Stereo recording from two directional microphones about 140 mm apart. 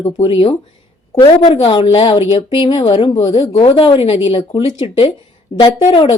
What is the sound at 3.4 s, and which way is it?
Speech, 40° left (ahead or behind).